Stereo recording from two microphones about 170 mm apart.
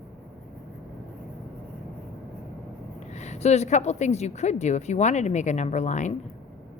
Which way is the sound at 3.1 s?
40° left (ahead or behind).